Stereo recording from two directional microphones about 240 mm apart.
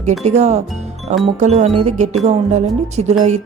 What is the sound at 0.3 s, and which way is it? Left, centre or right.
Speech, right.